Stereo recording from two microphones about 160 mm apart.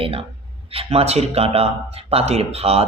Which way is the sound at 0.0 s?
35° right (ahead or behind).